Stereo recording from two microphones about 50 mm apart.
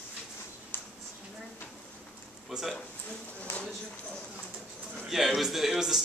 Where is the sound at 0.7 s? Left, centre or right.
Left.